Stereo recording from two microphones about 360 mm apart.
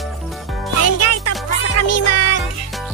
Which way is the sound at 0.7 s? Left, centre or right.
Left.